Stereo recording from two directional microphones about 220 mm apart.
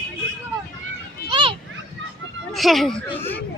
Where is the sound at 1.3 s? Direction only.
20° right (ahead or behind).